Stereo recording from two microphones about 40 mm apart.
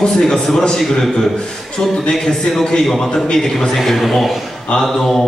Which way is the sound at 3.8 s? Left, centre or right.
Centre.